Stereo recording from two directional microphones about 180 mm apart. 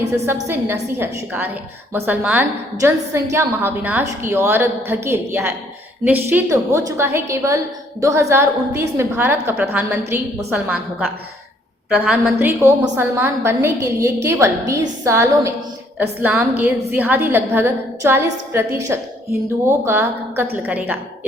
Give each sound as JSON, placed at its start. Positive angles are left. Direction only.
{"t": 0.4, "sound": "a woman's voice", "side_deg": -10}